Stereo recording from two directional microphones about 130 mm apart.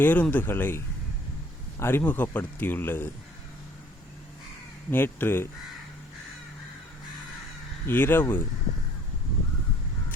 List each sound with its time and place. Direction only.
0.0 s speech: 15° left (ahead or behind)
1.8 s speech: 15° left (ahead or behind)
4.9 s speech: 15° left (ahead or behind)
7.9 s speech: 15° left (ahead or behind)